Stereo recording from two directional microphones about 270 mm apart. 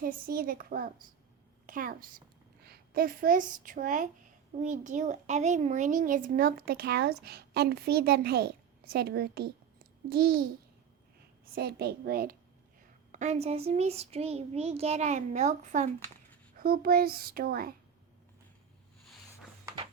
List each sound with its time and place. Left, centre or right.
0.0 s a woman's voice: right
11.5 s a child's voice: right
19.6 s a sound: centre